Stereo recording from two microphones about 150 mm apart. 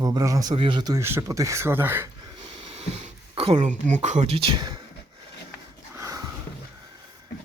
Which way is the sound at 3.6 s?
55° right (ahead or behind).